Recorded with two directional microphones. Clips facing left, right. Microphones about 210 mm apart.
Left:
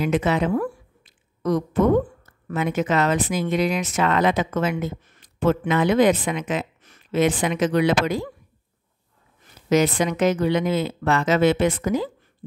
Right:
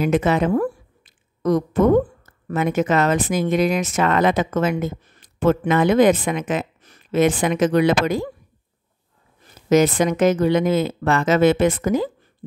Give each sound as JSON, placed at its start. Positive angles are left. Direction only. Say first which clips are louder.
{"t": 0.0, "sound": "speech", "louder": "right 3 dB", "side_deg": -50}
{"t": 9.7, "sound": "speech", "louder": "right 3 dB", "side_deg": -45}